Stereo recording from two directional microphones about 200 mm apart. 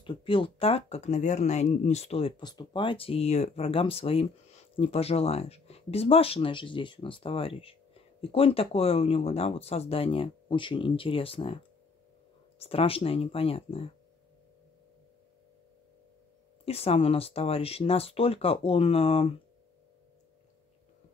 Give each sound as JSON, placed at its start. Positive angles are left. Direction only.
{"t": 0.0, "sound": "speech", "side_deg": 25}
{"t": 16.6, "sound": "speech", "side_deg": 30}